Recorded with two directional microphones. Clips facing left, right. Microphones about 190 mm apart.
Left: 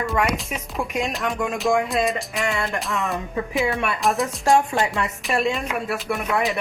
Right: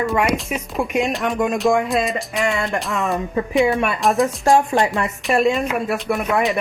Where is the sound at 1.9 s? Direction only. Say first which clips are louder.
Right 2 dB; centre (ahead or behind).